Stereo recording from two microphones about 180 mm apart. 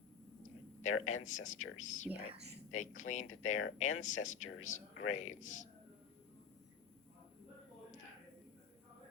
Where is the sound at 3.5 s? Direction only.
90° left.